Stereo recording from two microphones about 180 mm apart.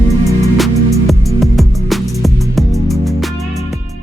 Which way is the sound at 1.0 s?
Centre (ahead or behind).